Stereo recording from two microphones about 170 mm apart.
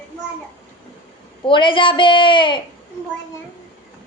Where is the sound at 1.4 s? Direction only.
30° left (ahead or behind).